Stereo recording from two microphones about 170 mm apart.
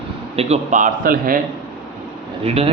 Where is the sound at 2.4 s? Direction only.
35° right (ahead or behind).